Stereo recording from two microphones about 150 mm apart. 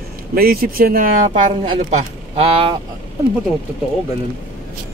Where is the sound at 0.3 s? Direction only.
85° right.